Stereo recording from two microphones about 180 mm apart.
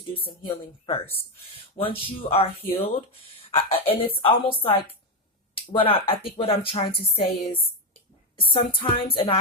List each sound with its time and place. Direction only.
0.3 s speech: 30° left (ahead or behind)
8.7 s speech: 30° left (ahead or behind)